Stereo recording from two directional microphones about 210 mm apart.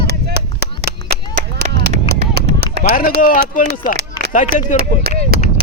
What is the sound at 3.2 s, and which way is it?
Speech, 40° left (ahead or behind).